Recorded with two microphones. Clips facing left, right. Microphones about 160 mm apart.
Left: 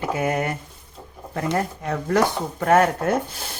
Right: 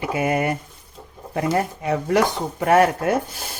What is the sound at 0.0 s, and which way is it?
Speech, 10° right (ahead or behind).